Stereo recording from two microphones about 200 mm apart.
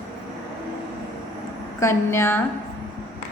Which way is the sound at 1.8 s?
15° left (ahead or behind).